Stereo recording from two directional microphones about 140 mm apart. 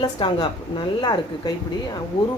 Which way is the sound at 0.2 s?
35° left (ahead or behind).